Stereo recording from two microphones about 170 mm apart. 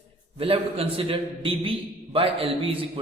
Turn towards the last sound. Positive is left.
turn(degrees=-30)  # may be behind; listen again after turning